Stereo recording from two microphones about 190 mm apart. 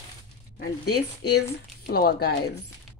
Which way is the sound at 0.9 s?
55° left (ahead or behind).